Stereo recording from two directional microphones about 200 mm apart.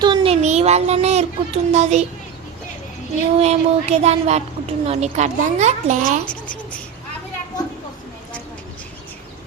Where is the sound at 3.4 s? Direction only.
30° right (ahead or behind).